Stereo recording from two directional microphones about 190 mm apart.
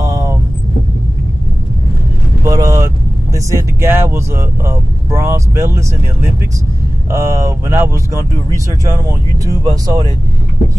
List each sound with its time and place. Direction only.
0.0 s vehicle: 15° right (ahead or behind)
2.4 s vehicle: 15° right (ahead or behind)
3.3 s speech: 15° right (ahead or behind)